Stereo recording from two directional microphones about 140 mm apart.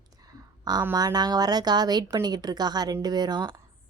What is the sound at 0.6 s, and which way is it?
A woman's voice, 30° right (ahead or behind).